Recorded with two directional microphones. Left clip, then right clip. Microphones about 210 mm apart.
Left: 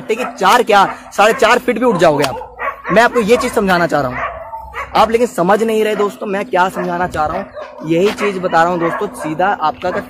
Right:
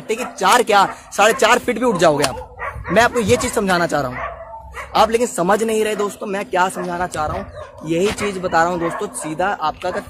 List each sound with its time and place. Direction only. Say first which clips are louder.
0.4 s speech: left 3 dB; centre (ahead or behind)
8.7 s speech: left 5 dB; 25° left (ahead or behind)
9.0 s speech: left 5 dB; centre (ahead or behind)